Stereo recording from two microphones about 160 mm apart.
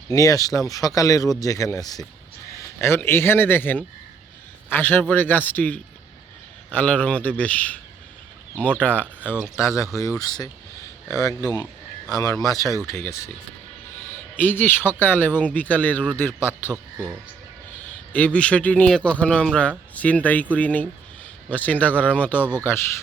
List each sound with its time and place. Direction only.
0.1 s a man's voice: 20° left (ahead or behind)
8.8 s a man's voice: 10° left (ahead or behind)
9.2 s speech: 5° right (ahead or behind)
9.6 s a man's voice: 15° left (ahead or behind)
14.3 s a man's voice: 10° left (ahead or behind)
16.7 s speech: 20° right (ahead or behind)
17.8 s a man's voice: 10° left (ahead or behind)